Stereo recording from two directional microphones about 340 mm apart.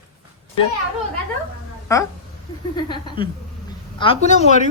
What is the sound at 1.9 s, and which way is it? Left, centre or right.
Speech, centre.